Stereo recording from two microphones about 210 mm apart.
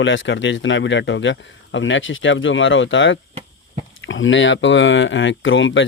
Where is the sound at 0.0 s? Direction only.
60° left (ahead or behind).